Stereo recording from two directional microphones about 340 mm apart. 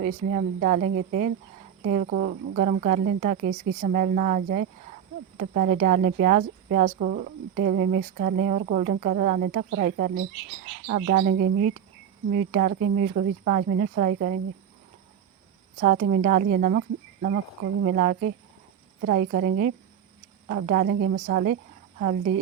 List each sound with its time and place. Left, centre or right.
0.0 s a woman's voice: right
15.8 s a woman's voice: right